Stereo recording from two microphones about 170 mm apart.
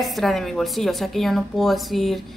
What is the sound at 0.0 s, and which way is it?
A woman's voice, centre (ahead or behind).